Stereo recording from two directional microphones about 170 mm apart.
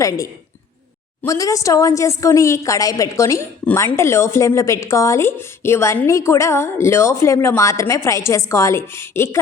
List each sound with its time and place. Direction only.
0.0 s a woman's voice: 20° left (ahead or behind)